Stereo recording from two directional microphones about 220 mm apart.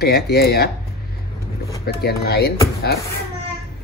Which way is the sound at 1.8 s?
45° left (ahead or behind).